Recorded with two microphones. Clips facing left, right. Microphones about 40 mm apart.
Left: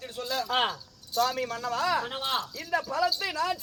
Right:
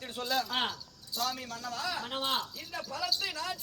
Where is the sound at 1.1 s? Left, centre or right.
Left.